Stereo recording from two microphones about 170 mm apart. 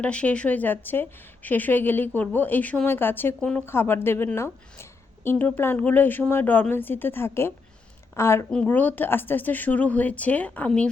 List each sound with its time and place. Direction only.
0.0 s a woman's voice: 5° left (ahead or behind)